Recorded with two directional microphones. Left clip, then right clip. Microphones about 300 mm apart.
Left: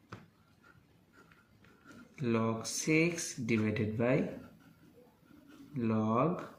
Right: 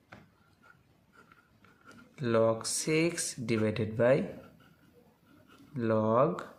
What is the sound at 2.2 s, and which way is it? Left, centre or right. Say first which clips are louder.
Speech: right 7 dB; right.